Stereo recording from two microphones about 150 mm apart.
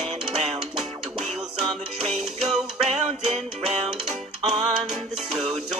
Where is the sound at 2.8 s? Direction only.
45° right (ahead or behind).